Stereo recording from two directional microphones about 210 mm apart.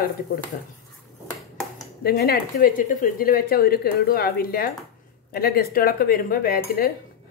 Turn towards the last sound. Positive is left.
turn(degrees=45)  # may be behind; listen again after turning